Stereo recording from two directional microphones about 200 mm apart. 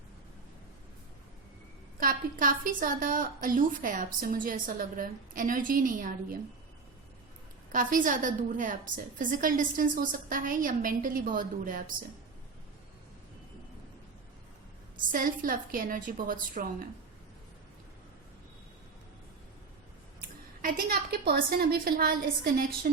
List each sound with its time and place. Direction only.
2.0 s a woman's voice: 45° right (ahead or behind)
7.7 s a woman's voice: 40° right (ahead or behind)
14.9 s a woman's voice: 45° right (ahead or behind)
20.6 s a woman's voice: 45° right (ahead or behind)